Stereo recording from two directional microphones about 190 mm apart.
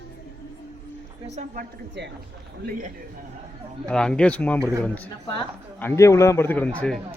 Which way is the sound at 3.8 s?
5° left (ahead or behind).